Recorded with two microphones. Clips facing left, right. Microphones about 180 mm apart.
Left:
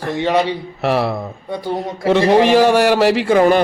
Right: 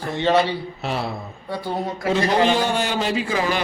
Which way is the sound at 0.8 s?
80° left.